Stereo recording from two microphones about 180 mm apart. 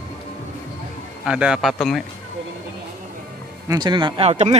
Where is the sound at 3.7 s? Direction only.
25° right (ahead or behind).